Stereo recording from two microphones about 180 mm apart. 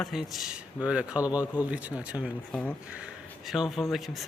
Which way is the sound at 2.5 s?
5° left (ahead or behind).